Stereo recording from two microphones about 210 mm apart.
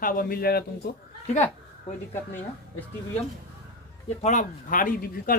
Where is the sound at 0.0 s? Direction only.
40° left (ahead or behind).